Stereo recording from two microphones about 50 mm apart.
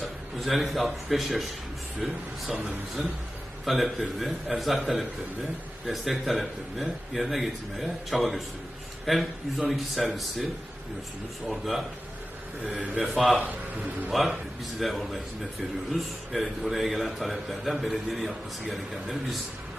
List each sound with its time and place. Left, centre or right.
0.3 s a man's voice: centre
2.5 s a man's voice: right
3.7 s a man's voice: centre
11.4 s a man's voice: centre
13.0 s a man's voice: centre